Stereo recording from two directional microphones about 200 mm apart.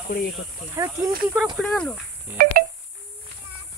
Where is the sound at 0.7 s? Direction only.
15° right (ahead or behind).